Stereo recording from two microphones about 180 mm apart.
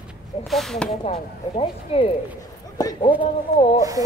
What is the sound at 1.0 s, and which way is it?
Speech, 35° left (ahead or behind).